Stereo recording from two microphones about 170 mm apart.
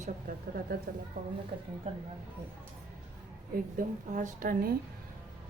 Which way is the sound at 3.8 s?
55° right (ahead or behind).